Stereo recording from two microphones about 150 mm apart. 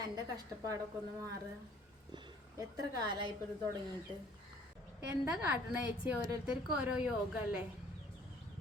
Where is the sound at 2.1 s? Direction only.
25° right (ahead or behind).